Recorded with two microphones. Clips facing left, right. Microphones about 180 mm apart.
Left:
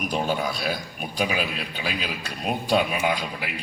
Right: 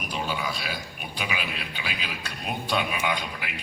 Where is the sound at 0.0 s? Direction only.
45° left (ahead or behind).